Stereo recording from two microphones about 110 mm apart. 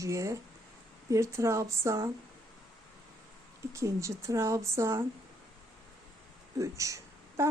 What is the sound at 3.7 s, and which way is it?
A woman's voice, 25° right (ahead or behind).